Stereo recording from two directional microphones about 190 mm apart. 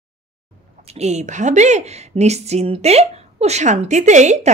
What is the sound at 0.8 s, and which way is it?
A woman's voice, 35° right (ahead or behind).